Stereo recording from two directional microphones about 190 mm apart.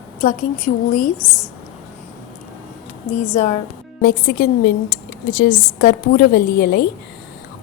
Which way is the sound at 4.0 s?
55° left (ahead or behind).